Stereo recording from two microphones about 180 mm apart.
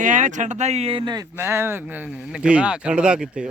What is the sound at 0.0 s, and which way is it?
Speech, 45° right (ahead or behind).